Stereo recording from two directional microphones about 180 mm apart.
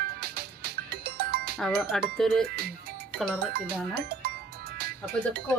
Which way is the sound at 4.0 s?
60° right (ahead or behind).